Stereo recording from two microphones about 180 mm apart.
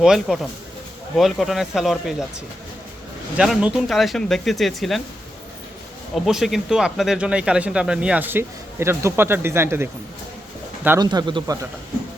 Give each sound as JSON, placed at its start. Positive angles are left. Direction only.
{"t": 0.0, "sound": "speech", "side_deg": 0}
{"t": 3.3, "sound": "speech", "side_deg": -5}
{"t": 6.2, "sound": "speech", "side_deg": 0}